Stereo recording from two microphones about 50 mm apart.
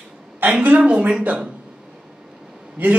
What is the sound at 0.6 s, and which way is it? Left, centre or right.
Speech, right.